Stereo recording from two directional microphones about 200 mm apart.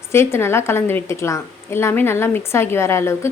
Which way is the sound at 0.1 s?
10° left (ahead or behind).